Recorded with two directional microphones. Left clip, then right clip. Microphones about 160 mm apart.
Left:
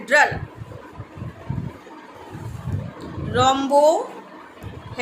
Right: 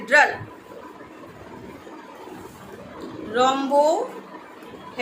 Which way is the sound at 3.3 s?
30° left (ahead or behind).